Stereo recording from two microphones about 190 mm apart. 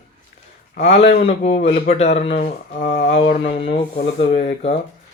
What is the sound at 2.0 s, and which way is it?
Speech, 35° left (ahead or behind).